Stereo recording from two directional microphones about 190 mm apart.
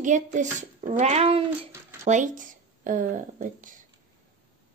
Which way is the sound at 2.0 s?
40° right (ahead or behind).